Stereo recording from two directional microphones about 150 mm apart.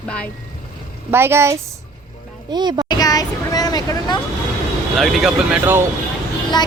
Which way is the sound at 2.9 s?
25° left (ahead or behind).